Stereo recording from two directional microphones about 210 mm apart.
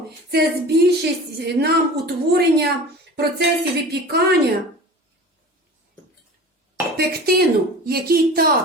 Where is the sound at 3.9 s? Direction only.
50° right (ahead or behind).